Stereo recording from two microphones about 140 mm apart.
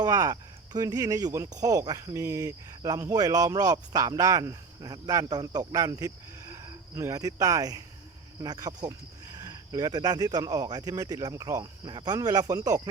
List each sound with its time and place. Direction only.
0.0 s speech: 25° right (ahead or behind)